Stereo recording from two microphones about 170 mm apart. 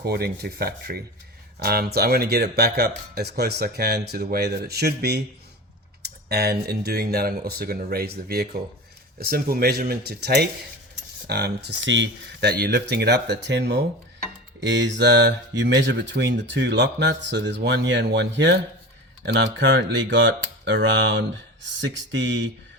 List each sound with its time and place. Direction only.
0.0 s speech: 65° right (ahead or behind); by 22.4 s 90° right